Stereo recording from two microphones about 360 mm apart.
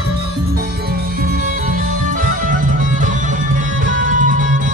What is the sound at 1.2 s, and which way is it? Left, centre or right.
Music, right.